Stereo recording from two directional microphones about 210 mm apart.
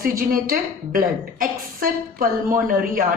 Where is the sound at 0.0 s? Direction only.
40° right (ahead or behind).